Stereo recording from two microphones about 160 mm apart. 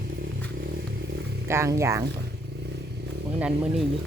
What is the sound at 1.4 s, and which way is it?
Speech, 15° right (ahead or behind).